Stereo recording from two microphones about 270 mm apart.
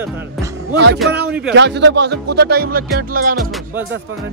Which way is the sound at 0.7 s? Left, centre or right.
Right.